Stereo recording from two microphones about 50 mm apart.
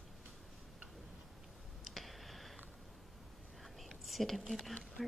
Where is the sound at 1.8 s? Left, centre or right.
Centre.